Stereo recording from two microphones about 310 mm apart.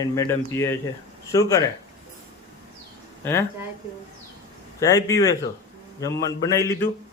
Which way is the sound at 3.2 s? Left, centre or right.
Centre.